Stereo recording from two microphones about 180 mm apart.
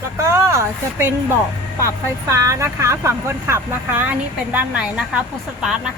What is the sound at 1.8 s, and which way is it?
Speech, 15° right (ahead or behind).